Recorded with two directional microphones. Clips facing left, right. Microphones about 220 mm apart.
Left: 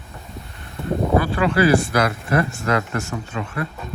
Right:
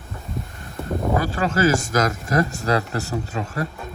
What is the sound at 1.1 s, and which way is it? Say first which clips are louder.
Speech: left 4 dB; 40° right (ahead or behind).